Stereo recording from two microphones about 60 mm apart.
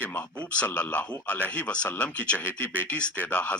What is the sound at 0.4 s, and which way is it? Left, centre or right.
Speech, left.